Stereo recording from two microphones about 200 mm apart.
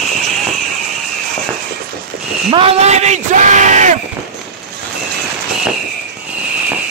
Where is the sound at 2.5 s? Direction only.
30° right (ahead or behind).